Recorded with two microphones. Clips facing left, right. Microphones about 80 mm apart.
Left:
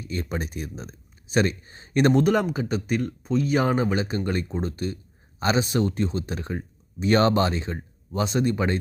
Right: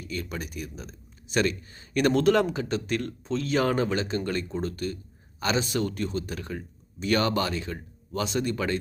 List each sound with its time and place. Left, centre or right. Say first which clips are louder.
0.0 s speech: left 4 dB; left